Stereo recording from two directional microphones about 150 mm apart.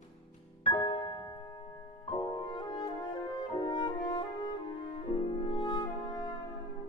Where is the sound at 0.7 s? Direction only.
25° left (ahead or behind).